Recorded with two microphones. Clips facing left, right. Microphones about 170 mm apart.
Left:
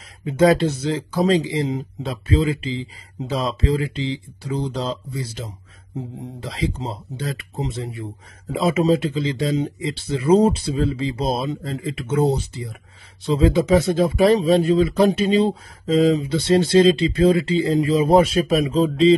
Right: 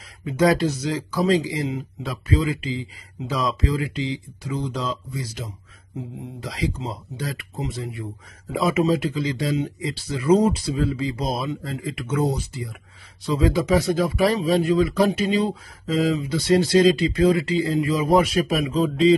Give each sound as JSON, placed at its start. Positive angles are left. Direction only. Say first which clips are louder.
{"t": 0.2, "sound": "speech", "louder": "left 3 dB", "side_deg": 25}